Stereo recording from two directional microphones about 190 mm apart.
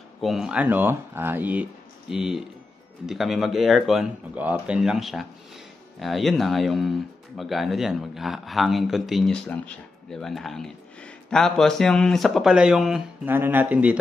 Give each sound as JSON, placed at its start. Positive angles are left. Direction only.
{"t": 0.2, "sound": "speech", "side_deg": 0}